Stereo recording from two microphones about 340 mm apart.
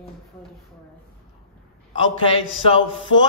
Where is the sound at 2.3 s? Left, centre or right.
Centre.